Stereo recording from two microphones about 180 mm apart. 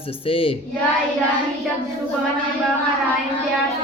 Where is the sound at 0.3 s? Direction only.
30° left (ahead or behind).